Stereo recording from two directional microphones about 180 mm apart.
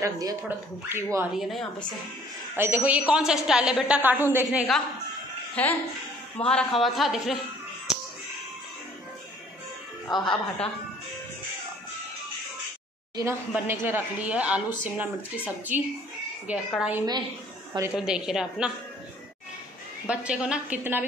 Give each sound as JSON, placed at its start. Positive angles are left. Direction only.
{"t": 0.0, "sound": "a woman's voice", "side_deg": -20}
{"t": 1.3, "sound": "a woman's voice", "side_deg": 0}
{"t": 2.5, "sound": "a woman's voice", "side_deg": -10}
{"t": 4.5, "sound": "a woman's voice", "side_deg": 0}
{"t": 10.1, "sound": "a woman's voice", "side_deg": 25}
{"t": 13.1, "sound": "a woman's voice", "side_deg": -15}
{"t": 20.1, "sound": "a woman's voice", "side_deg": -5}